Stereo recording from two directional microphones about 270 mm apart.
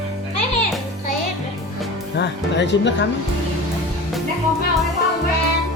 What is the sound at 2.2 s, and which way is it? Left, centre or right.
Speech, left.